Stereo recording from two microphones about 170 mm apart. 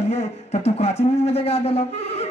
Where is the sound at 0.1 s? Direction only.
40° left (ahead or behind).